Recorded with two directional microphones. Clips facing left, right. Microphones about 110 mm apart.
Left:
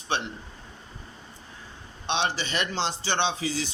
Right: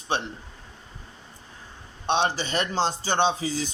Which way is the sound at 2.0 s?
45° right (ahead or behind).